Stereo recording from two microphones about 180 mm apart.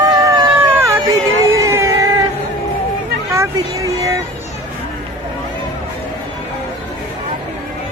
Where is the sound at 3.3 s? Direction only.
15° right (ahead or behind).